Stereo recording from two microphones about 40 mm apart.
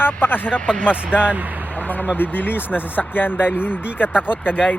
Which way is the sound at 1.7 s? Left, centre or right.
Left.